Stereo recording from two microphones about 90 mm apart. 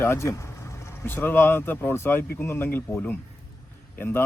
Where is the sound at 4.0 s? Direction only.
25° left (ahead or behind).